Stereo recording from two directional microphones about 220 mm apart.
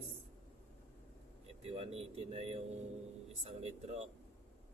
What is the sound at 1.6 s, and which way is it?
Speech, 25° right (ahead or behind).